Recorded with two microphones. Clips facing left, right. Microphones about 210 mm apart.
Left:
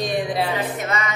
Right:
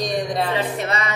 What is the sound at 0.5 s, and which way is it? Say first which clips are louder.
Music: right 1 dB; 35° right (ahead or behind).